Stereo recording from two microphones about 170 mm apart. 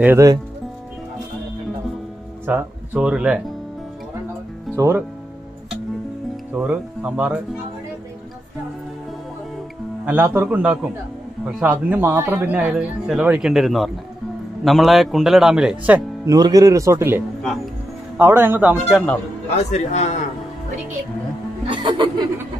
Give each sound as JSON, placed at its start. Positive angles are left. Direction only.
{"t": 0.0, "sound": "speech", "side_deg": -15}
{"t": 2.4, "sound": "speech", "side_deg": -10}
{"t": 4.7, "sound": "speech", "side_deg": -15}
{"t": 6.5, "sound": "speech", "side_deg": -10}
{"t": 10.0, "sound": "a man's voice", "side_deg": -10}
{"t": 16.3, "sound": "speech", "side_deg": -20}
{"t": 19.5, "sound": "a man's voice", "side_deg": 40}
{"t": 21.6, "sound": "speech", "side_deg": -30}